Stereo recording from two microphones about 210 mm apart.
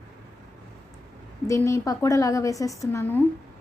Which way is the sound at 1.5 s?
15° left (ahead or behind).